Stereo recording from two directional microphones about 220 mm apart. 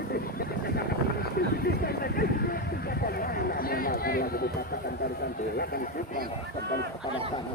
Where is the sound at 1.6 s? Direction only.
45° left (ahead or behind).